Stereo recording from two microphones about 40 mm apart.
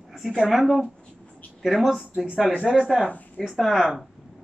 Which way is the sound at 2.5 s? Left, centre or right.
Left.